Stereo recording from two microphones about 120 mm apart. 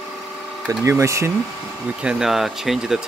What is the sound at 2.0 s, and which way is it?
Speech, 5° right (ahead or behind).